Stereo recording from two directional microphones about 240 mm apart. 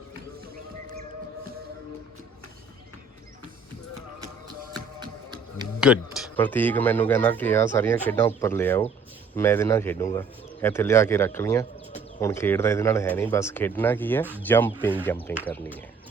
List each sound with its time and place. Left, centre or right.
4.7 s music: centre
5.8 s speech: centre